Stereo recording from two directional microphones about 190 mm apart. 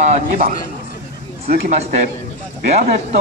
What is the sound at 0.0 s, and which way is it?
Speech, 35° right (ahead or behind).